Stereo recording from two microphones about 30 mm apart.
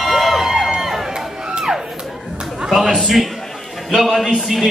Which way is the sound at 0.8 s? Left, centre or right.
Centre.